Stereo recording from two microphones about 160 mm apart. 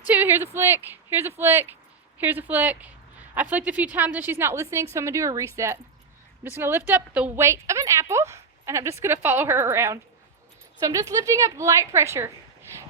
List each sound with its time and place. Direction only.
0.1 s a woman's voice: 10° right (ahead or behind)